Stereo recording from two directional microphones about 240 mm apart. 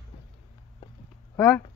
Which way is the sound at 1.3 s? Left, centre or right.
Centre.